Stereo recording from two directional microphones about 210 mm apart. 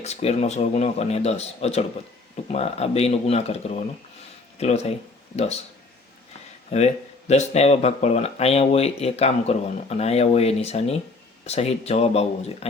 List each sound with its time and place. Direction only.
0.0 s speech: 30° left (ahead or behind)
6.7 s speech: 30° left (ahead or behind)